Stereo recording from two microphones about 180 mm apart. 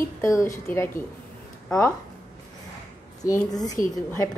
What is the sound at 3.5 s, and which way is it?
Speech, 20° left (ahead or behind).